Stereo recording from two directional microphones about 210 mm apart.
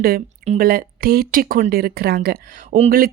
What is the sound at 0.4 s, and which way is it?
Speech, 40° right (ahead or behind).